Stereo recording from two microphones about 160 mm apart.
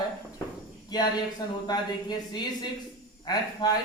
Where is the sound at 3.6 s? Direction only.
25° left (ahead or behind).